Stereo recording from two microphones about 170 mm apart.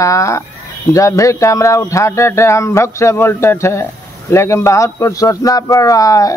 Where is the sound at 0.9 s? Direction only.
20° left (ahead or behind).